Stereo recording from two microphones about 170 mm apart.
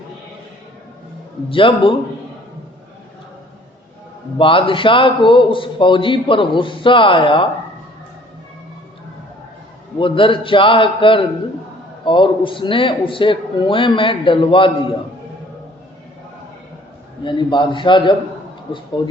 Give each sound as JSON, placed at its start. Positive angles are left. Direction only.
{"t": 1.5, "sound": "a man's voice", "side_deg": 30}
{"t": 4.4, "sound": "a man's voice", "side_deg": 30}
{"t": 10.0, "sound": "a man's voice", "side_deg": 30}
{"t": 17.2, "sound": "a man's voice", "side_deg": 25}